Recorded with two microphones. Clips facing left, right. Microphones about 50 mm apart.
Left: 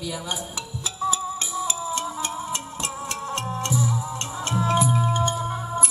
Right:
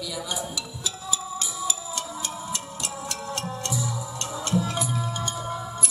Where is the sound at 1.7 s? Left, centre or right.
Left.